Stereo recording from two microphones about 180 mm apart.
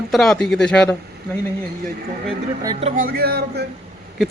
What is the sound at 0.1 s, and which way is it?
Speech, centre (ahead or behind).